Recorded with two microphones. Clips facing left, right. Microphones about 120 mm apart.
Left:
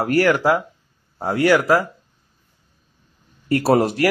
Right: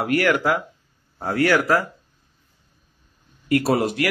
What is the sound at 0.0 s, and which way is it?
A man's voice, 30° left (ahead or behind).